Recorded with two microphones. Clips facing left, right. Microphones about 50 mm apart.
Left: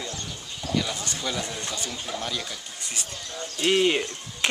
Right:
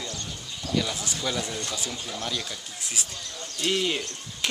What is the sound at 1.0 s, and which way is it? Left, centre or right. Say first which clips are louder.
Speech: even; centre.